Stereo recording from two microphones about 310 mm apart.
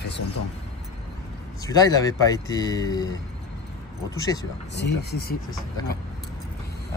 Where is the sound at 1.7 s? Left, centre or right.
Centre.